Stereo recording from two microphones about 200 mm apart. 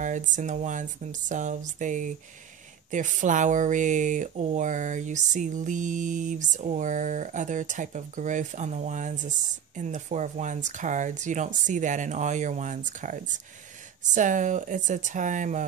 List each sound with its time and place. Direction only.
0.0 s speech: 40° right (ahead or behind)